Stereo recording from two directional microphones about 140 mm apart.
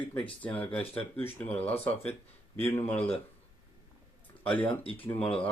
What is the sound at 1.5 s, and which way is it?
Speech, 45° left (ahead or behind).